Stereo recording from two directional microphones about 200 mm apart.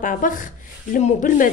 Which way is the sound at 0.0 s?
40° left (ahead or behind).